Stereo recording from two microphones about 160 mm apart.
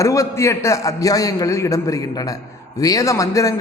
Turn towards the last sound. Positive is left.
turn(degrees=20)  # may be behind; listen again after turning